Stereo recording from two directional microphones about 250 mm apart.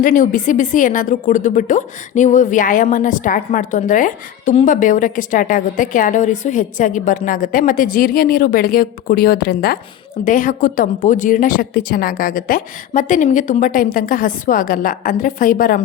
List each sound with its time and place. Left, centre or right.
0.0 s a woman's voice: left